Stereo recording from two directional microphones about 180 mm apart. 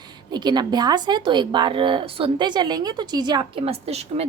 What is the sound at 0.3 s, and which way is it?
Speech, 25° right (ahead or behind).